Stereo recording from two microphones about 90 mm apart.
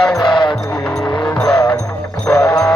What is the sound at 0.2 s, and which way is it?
Music, 60° left (ahead or behind).